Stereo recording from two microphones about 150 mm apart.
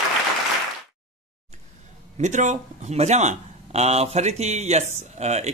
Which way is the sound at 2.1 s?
55° right (ahead or behind).